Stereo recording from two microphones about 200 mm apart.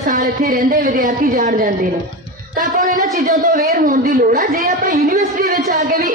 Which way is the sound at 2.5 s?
45° right (ahead or behind).